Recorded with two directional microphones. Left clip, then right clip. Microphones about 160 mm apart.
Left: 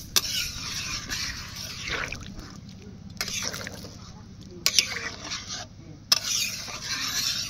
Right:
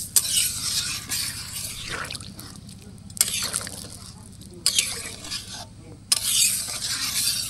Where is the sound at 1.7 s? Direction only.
10° left (ahead or behind).